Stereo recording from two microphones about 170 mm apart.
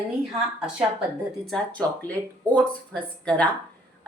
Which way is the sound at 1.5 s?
10° left (ahead or behind).